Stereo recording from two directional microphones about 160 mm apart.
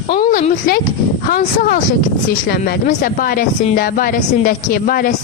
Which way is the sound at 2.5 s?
65° left (ahead or behind).